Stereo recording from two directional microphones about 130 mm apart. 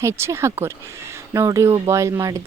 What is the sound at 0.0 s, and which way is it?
A woman's voice, 20° right (ahead or behind).